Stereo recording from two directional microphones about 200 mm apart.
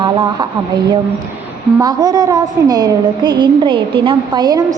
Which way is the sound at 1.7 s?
20° right (ahead or behind).